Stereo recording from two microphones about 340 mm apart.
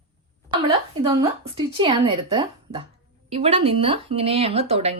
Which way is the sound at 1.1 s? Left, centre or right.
Centre.